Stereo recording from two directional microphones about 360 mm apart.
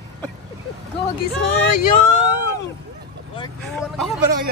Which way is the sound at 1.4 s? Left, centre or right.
Left.